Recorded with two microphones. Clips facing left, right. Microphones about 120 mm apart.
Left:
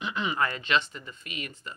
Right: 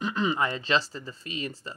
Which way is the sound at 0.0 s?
40° right (ahead or behind).